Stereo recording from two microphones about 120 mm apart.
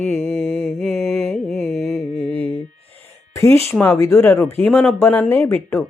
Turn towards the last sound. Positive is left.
turn(degrees=20)  # may be behind; listen again after turning